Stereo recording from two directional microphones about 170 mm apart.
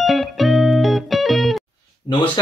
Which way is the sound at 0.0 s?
Centre (ahead or behind).